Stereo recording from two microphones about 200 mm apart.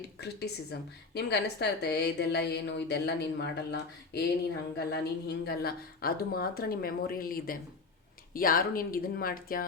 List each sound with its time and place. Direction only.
0.2 s a woman's voice: 55° left (ahead or behind)